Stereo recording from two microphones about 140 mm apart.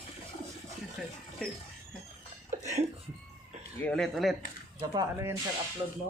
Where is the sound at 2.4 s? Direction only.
55° right (ahead or behind).